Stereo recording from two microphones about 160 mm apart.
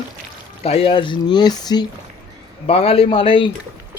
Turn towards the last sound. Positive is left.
turn(degrees=35)  # may be behind; listen again after turning